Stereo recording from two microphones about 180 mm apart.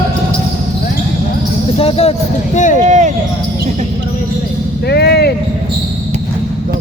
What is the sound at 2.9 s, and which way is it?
Basketball bounce, 40° right (ahead or behind).